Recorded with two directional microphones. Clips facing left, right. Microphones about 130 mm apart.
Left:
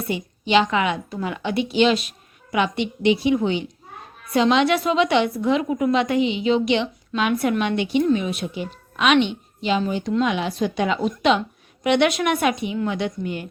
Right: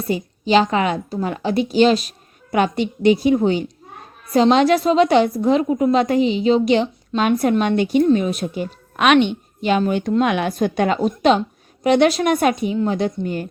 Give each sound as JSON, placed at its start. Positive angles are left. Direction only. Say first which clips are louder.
{"t": 0.0, "sound": "a woman's voice", "louder": "right 4 dB", "side_deg": -35}